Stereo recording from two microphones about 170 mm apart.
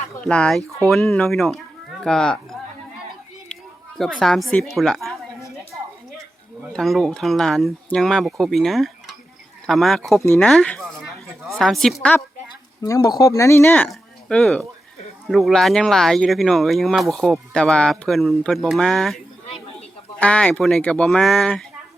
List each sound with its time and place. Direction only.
0.3 s speech: 5° left (ahead or behind)
3.5 s a sound: centre (ahead or behind)
4.2 s speech: centre (ahead or behind)
6.7 s speech: centre (ahead or behind)
10.2 s speech: 15° left (ahead or behind)
10.5 s a woman's voice: 5° left (ahead or behind)
12.8 s speech: 20° left (ahead or behind); by 21.6 s 5° left (ahead or behind)